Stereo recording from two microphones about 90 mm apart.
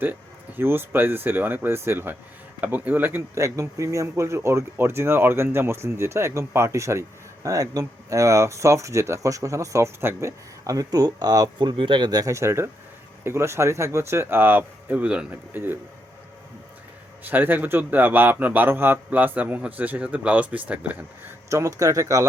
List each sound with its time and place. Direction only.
0.0 s a man's voice: 20° right (ahead or behind); by 11.7 s 50° right (ahead or behind)
11.8 s speech: 60° right (ahead or behind)
12.3 s a man's voice: 30° right (ahead or behind)
17.2 s a man's voice: 20° right (ahead or behind)
21.5 s speech: 40° right (ahead or behind)